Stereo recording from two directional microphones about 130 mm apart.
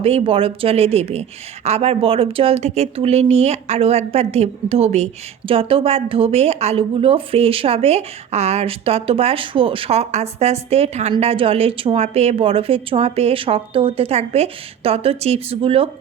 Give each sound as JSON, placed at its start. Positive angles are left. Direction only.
{"t": 0.0, "sound": "a woman's voice", "side_deg": -45}
{"t": 5.5, "sound": "a woman's voice", "side_deg": -45}